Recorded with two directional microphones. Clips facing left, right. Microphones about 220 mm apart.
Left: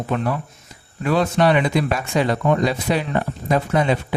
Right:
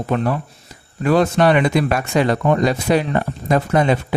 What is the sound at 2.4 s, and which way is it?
Speech, 45° right (ahead or behind).